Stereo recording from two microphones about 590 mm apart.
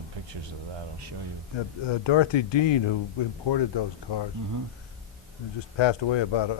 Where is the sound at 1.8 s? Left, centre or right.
Left.